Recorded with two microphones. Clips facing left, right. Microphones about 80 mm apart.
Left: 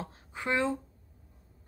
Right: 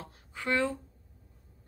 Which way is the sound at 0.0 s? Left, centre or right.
Left.